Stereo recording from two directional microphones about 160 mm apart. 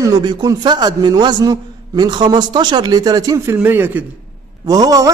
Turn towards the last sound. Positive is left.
turn(degrees=-20)  # may be behind; listen again after turning